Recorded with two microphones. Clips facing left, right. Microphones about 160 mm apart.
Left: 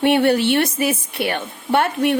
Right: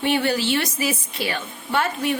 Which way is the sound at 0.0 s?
60° left (ahead or behind).